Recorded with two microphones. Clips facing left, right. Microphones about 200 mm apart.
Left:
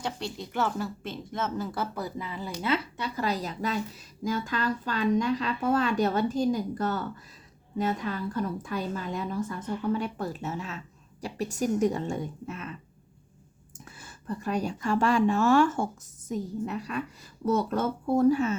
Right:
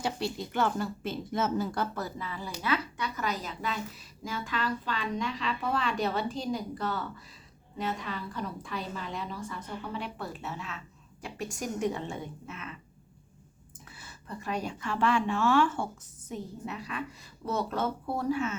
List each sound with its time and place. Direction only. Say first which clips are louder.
0.0 s a woman's voice: right 2 dB; 5° right (ahead or behind); by 12.7 s 40° left (ahead or behind)
13.7 s a woman's voice: left 3 dB; 45° left (ahead or behind)